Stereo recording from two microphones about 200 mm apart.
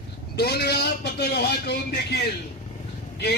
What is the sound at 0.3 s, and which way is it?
A man's voice, 55° left (ahead or behind).